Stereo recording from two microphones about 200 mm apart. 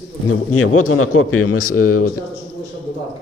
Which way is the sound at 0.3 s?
90° left.